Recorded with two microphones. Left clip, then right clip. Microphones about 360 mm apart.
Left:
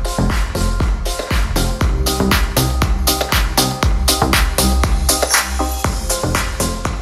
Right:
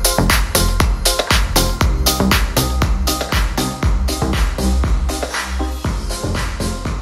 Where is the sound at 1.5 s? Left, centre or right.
Centre.